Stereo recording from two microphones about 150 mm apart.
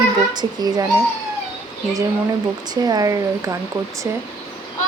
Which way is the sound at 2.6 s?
25° right (ahead or behind).